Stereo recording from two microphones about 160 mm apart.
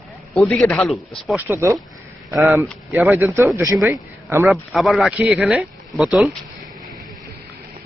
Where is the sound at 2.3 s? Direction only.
Centre (ahead or behind).